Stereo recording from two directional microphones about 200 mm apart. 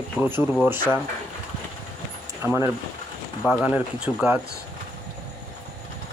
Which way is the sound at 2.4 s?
15° right (ahead or behind).